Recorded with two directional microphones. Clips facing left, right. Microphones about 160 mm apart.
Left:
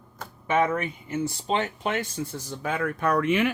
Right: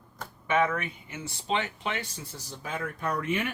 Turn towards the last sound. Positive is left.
turn(degrees=85)